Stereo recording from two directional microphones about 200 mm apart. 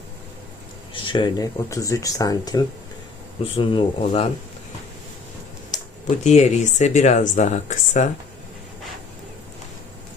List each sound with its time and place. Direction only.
0.9 s speech: 25° left (ahead or behind)
6.1 s speech: 35° left (ahead or behind)